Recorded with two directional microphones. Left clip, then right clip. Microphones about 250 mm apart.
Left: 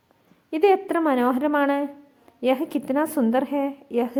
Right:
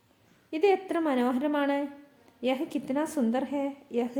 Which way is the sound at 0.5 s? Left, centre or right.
Centre.